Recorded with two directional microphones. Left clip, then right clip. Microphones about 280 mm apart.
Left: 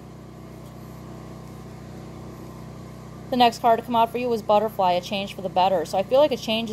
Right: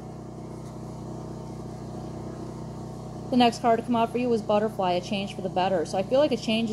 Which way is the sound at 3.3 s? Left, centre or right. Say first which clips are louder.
Left 4 dB; left.